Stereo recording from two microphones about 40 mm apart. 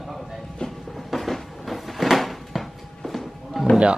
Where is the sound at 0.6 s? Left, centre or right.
Centre.